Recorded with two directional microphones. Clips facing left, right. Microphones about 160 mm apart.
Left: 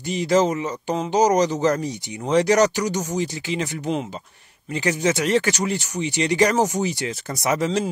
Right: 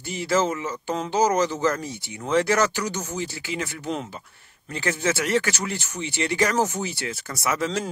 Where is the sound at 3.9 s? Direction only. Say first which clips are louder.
Left 4 dB; 5° left (ahead or behind).